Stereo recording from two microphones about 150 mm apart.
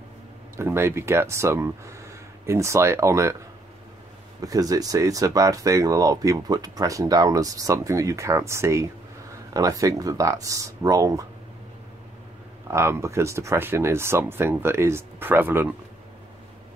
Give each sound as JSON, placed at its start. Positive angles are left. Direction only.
{"t": 0.6, "sound": "speech", "side_deg": -15}
{"t": 4.4, "sound": "speech", "side_deg": -25}
{"t": 12.6, "sound": "speech", "side_deg": -20}